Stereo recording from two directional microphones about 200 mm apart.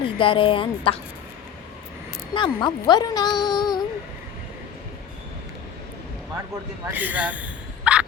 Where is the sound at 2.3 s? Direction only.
25° left (ahead or behind).